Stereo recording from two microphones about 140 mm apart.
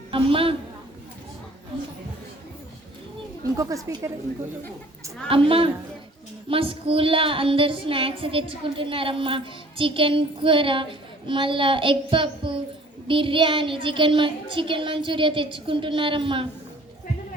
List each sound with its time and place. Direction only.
0.1 s child singing: 40° right (ahead or behind)
3.6 s a woman's voice: 25° right (ahead or behind)
5.3 s child singing: 40° right (ahead or behind)